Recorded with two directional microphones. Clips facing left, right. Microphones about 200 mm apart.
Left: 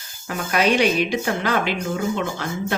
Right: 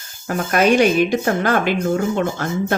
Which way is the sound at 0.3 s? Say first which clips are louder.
Right 4 dB; 45° right (ahead or behind).